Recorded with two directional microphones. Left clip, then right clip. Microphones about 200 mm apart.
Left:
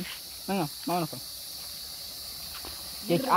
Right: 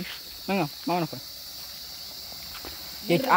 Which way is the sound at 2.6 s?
25° right (ahead or behind).